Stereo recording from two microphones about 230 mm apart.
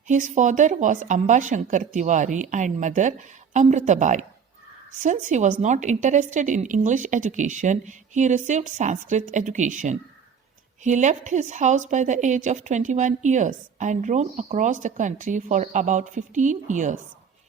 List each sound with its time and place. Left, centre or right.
0.1 s a woman's voice: right